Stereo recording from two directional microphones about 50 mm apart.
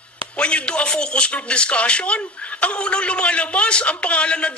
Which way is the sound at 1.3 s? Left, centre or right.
Left.